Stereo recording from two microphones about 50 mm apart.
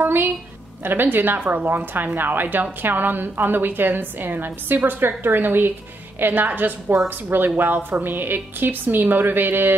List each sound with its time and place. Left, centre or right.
0.0 s a sound: right
0.8 s a woman's voice: right
2.4 s a woman's voice: right
2.8 s a woman's voice: right